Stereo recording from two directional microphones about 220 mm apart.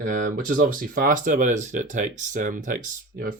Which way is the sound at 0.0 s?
40° right (ahead or behind).